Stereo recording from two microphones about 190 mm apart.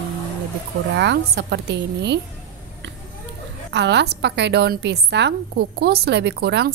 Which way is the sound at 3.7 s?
65° right (ahead or behind).